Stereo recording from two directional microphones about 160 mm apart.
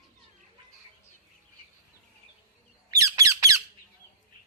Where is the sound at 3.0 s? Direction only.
20° right (ahead or behind).